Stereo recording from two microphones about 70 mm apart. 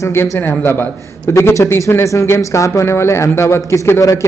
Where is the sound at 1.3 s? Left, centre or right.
Left.